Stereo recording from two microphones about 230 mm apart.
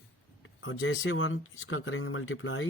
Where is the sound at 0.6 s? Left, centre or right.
Left.